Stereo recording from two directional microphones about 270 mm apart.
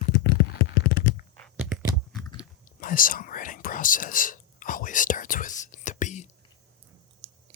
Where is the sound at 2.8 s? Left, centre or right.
Left.